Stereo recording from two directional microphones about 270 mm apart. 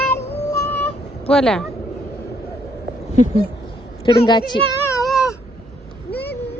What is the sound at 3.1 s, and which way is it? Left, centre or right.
Speech, left.